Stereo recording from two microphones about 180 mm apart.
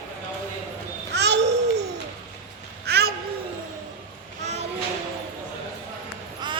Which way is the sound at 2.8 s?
60° right (ahead or behind).